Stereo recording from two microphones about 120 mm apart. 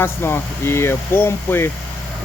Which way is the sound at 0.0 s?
20° left (ahead or behind).